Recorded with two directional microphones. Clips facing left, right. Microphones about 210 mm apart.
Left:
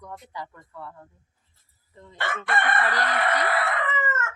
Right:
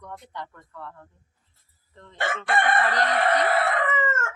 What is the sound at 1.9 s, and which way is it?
Crowing, 10° left (ahead or behind).